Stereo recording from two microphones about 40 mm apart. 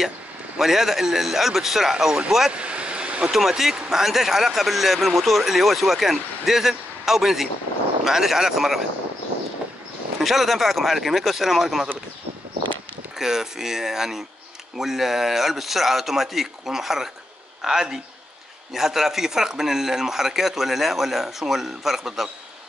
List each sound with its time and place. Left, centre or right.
0.6 s speech: centre
2.5 s vehicle: right
3.3 s speech: centre
10.2 s speech: centre
13.2 s speech: centre